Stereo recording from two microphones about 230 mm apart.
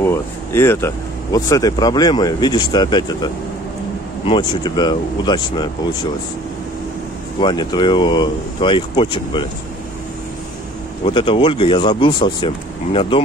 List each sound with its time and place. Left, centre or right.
0.0 s speech: centre
4.3 s speech: centre
7.3 s speech: centre
11.1 s speech: left